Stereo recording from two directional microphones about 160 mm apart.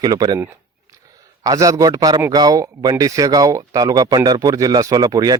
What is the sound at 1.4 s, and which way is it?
A man's voice, 20° right (ahead or behind).